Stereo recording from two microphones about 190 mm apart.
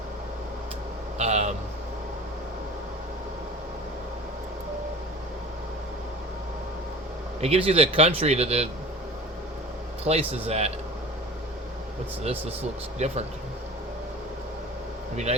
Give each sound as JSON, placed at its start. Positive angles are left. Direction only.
{"t": 1.2, "sound": "a sound", "side_deg": -35}
{"t": 7.4, "sound": "speech", "side_deg": -30}
{"t": 10.0, "sound": "speech", "side_deg": -30}
{"t": 12.2, "sound": "speech", "side_deg": -30}
{"t": 15.1, "sound": "speech", "side_deg": -35}